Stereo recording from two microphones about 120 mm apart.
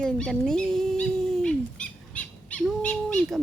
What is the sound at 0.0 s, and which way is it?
Dog, 5° left (ahead or behind).